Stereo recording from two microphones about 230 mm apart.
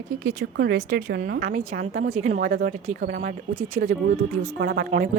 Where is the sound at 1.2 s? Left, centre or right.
Right.